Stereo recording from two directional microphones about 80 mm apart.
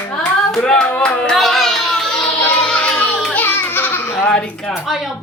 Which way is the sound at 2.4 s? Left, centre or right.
Centre.